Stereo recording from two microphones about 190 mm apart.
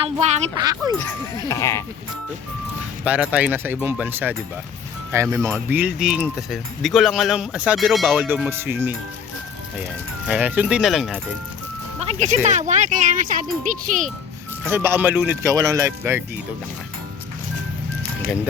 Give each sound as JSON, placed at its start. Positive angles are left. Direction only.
{"t": 0.0, "sound": "speech", "side_deg": -35}
{"t": 0.5, "sound": "a child's voice", "side_deg": -20}
{"t": 1.3, "sound": "speech", "side_deg": 20}
{"t": 3.0, "sound": "speech", "side_deg": -5}
{"t": 10.2, "sound": "speech", "side_deg": -5}
{"t": 11.9, "sound": "speech", "side_deg": -35}
{"t": 14.7, "sound": "speech", "side_deg": -10}